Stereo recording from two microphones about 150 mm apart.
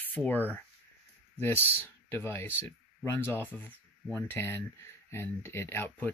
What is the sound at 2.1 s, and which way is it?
Speech, 15° left (ahead or behind).